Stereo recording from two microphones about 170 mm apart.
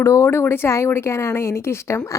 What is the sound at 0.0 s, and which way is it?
Speech, 15° left (ahead or behind).